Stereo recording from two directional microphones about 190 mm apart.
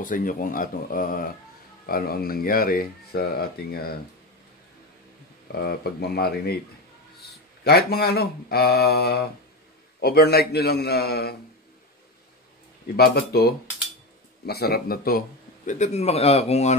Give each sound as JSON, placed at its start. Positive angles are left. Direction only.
{"t": 0.0, "sound": "speech", "side_deg": 45}
{"t": 5.5, "sound": "speech", "side_deg": 55}
{"t": 7.6, "sound": "speech", "side_deg": 55}
{"t": 12.9, "sound": "a man's voice", "side_deg": 55}